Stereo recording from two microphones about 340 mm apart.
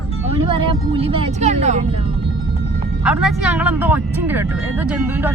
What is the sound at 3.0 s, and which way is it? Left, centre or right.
Speech, centre.